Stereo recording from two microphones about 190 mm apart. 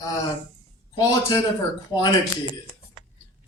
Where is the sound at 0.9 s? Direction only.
20° left (ahead or behind).